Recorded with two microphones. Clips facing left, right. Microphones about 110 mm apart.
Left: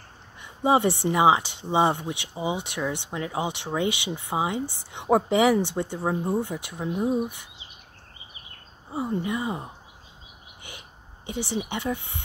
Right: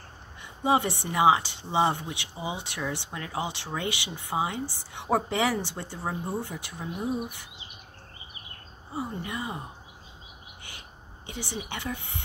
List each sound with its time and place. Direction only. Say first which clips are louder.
0.7 s speech: left 4 dB; 25° left (ahead or behind)
8.9 s speech: left 6 dB; 20° left (ahead or behind)
11.2 s speech: left 7 dB; 25° left (ahead or behind)